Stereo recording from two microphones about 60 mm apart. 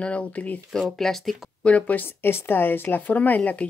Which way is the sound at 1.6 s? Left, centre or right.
Left.